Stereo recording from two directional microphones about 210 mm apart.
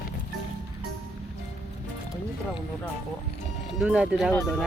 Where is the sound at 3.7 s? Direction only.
5° right (ahead or behind).